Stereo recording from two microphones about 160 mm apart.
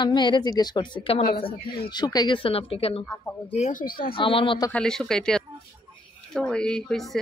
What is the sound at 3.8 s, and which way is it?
Speech, 65° left (ahead or behind).